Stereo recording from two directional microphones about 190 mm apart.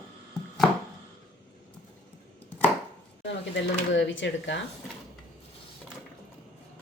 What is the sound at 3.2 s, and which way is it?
Speech, 70° left (ahead or behind).